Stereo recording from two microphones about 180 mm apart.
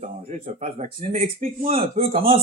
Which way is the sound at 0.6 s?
40° right (ahead or behind).